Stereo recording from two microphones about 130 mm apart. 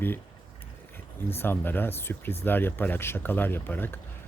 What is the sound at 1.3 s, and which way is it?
Speech, 15° left (ahead or behind).